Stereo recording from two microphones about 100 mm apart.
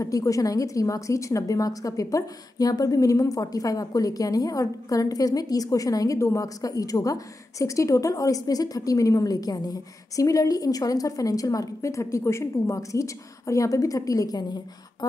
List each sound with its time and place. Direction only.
0.0 s a woman's voice: 35° left (ahead or behind)